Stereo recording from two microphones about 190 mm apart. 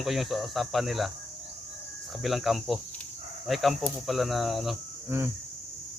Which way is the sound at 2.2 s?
Centre (ahead or behind).